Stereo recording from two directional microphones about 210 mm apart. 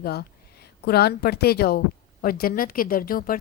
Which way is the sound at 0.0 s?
50° left (ahead or behind).